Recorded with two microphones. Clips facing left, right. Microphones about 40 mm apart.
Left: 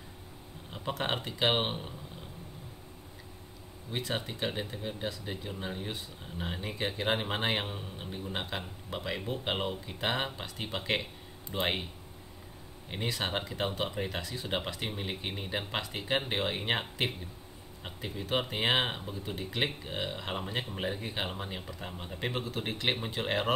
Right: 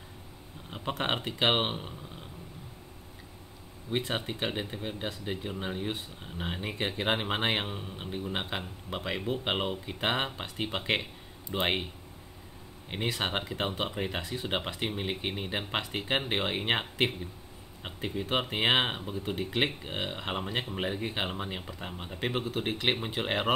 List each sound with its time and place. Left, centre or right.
0.7 s speech: centre
3.9 s speech: right
12.9 s speech: centre
17.8 s speech: right